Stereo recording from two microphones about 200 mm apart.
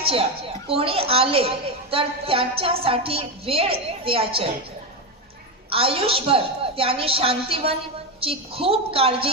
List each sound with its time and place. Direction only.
0.0 s a woman's voice: 30° right (ahead or behind)
5.7 s a woman's voice: 30° right (ahead or behind)